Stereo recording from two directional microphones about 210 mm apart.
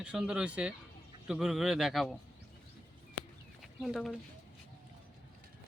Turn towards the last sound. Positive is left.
turn(degrees=0)  # may be behind; listen again after turning